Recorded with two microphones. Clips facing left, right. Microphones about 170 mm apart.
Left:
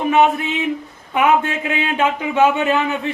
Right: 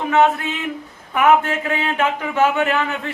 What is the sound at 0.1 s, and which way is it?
A man's voice, 15° left (ahead or behind).